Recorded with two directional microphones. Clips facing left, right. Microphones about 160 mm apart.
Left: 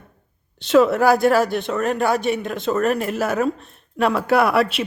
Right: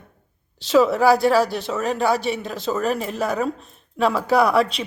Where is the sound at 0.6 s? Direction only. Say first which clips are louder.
Left 1 dB; centre (ahead or behind).